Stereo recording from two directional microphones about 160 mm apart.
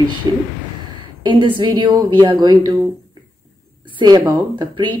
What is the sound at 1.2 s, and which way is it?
Speech, 30° right (ahead or behind).